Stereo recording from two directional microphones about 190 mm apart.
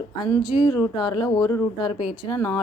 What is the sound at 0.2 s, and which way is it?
A woman's voice, 20° left (ahead or behind).